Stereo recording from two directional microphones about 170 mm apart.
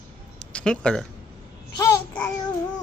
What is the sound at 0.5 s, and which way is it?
Speech, 5° left (ahead or behind).